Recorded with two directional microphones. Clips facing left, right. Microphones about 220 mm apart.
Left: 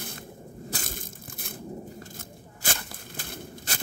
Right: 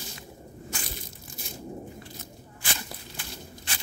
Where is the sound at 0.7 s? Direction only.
45° left (ahead or behind).